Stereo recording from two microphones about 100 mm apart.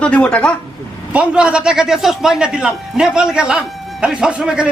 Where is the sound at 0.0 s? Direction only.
10° left (ahead or behind).